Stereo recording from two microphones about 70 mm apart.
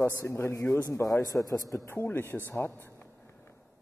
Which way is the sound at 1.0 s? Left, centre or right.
Left.